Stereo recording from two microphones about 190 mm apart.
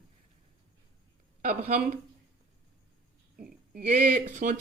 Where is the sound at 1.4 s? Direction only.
45° right (ahead or behind).